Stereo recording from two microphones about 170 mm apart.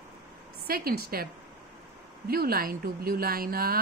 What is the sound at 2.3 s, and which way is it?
A woman's voice, 60° right (ahead or behind).